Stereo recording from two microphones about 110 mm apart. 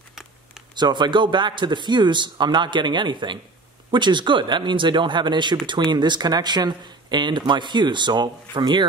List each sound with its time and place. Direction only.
0.7 s speech: 40° right (ahead or behind)